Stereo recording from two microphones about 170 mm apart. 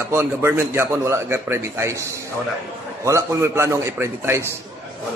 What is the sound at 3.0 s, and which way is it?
A man's voice, 15° right (ahead or behind).